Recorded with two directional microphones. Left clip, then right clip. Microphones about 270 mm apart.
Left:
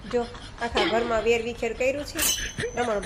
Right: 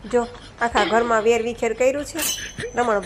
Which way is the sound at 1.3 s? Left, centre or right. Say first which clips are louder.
Right 5 dB; centre.